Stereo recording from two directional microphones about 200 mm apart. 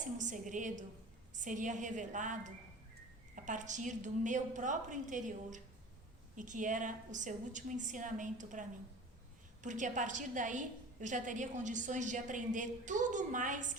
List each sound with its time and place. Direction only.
0.2 s a woman's voice: 40° right (ahead or behind)
9.6 s a woman's voice: 40° right (ahead or behind)